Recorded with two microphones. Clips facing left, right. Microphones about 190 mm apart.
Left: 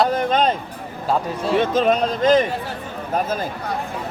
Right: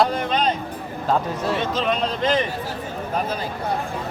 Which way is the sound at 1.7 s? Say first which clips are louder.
Left 5 dB; 45° left (ahead or behind).